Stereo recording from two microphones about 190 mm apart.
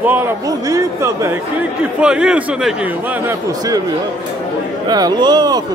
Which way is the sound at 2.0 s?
5° right (ahead or behind).